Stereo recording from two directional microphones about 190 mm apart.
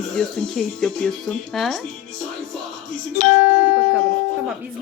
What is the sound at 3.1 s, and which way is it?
Speech, 40° left (ahead or behind).